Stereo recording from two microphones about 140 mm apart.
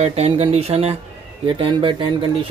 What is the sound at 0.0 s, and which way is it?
Speech, 50° right (ahead or behind).